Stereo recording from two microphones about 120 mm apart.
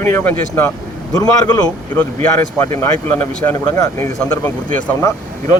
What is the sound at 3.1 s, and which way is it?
Speech, 20° left (ahead or behind).